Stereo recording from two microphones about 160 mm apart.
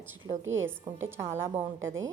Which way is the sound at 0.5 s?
15° right (ahead or behind).